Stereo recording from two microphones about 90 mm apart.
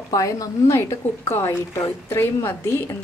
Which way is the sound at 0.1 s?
40° left (ahead or behind).